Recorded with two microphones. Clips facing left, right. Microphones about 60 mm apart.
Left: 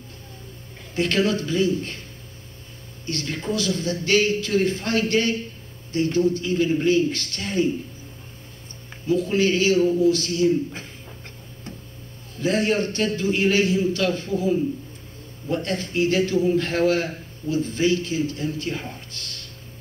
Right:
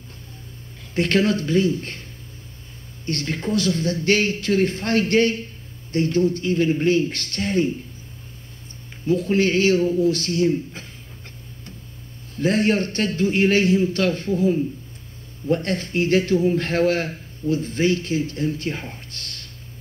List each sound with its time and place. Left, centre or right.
0.9 s a man's voice: right
3.1 s a man's voice: right
9.0 s a man's voice: right
12.4 s a man's voice: right